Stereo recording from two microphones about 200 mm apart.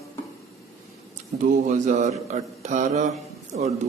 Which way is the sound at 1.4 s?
40° right (ahead or behind).